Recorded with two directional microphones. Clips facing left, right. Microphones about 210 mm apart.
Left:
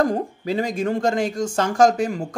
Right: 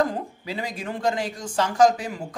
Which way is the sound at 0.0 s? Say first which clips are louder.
Left 4 dB; 45° left (ahead or behind).